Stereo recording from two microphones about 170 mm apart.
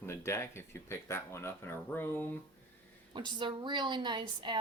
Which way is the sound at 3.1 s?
25° right (ahead or behind).